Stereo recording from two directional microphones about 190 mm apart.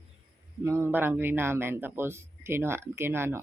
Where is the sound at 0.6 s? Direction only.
15° right (ahead or behind).